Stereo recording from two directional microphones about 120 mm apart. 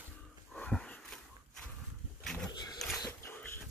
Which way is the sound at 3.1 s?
20° left (ahead or behind).